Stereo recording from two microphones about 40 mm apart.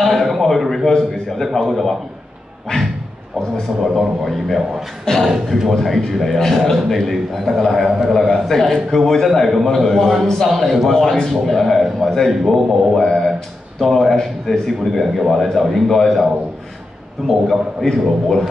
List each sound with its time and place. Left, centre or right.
0.0 s a sound: centre
0.8 s a man's voice: centre
2.7 s speech: left
3.8 s a man's voice: centre
17.3 s a man's voice: centre